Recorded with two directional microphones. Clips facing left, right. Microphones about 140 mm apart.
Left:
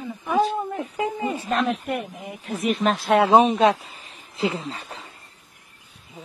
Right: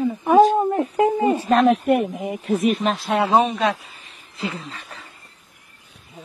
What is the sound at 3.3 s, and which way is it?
Speech, 20° left (ahead or behind).